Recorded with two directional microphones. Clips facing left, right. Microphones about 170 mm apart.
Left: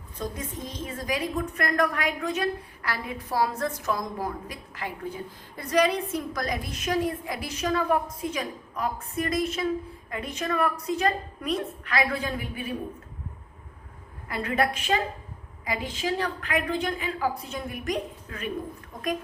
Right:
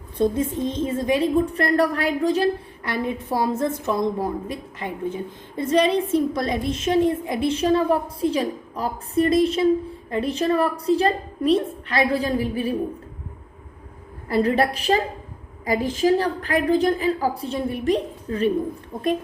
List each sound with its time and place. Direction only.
0.2 s a woman's voice: 25° right (ahead or behind)
14.3 s a woman's voice: 35° right (ahead or behind)